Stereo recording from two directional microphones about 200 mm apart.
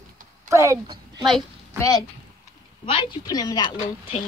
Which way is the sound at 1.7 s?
15° left (ahead or behind).